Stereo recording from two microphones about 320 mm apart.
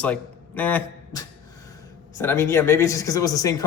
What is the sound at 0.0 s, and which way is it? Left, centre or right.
A man's voice, centre.